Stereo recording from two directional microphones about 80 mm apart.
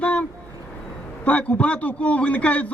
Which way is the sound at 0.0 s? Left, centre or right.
Centre.